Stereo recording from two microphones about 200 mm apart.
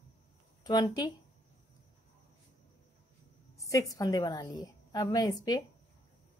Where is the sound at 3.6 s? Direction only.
15° left (ahead or behind).